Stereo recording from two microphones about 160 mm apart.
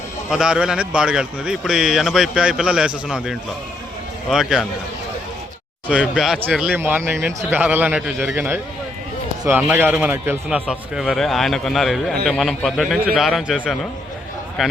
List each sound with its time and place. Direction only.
0.3 s a man's voice: 5° right (ahead or behind)
5.9 s a man's voice: 5° right (ahead or behind)